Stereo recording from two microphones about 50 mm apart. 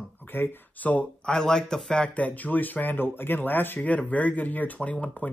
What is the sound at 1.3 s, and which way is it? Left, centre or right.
Speech, centre.